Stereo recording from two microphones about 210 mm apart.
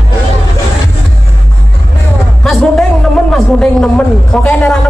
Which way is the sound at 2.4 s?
Centre (ahead or behind).